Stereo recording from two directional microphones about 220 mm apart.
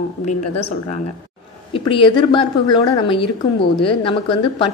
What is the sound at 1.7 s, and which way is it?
A woman's voice, 25° left (ahead or behind).